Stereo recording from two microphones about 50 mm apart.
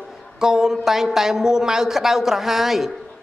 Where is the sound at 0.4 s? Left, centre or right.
Centre.